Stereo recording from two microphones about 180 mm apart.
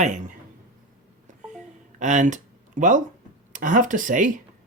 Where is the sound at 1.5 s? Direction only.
40° right (ahead or behind).